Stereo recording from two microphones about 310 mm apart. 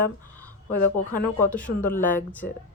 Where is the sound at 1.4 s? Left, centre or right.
Centre.